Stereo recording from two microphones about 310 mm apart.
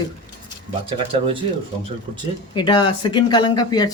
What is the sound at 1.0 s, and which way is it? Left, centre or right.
Speech, centre.